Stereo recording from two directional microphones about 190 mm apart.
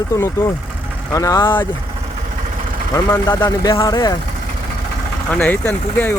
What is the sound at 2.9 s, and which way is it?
Speech, 20° left (ahead or behind).